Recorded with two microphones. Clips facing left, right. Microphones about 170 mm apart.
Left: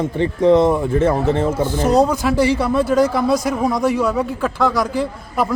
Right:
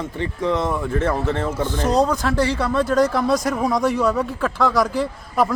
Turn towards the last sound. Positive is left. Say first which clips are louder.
# even
turn(degrees=0)  # may be behind; listen again after turning